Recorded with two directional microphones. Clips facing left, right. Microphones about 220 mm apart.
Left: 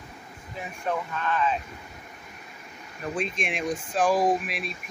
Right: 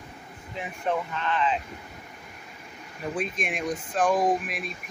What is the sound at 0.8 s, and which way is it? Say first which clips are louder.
Speech: right 1 dB; 20° right (ahead or behind).